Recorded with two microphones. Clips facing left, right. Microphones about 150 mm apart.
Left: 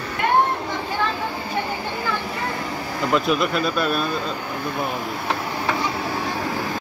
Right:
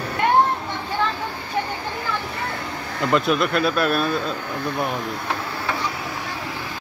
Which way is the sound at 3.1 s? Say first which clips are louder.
Right 1 dB; centre (ahead or behind).